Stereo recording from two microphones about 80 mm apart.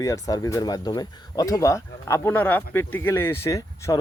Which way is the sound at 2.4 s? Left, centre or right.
Left.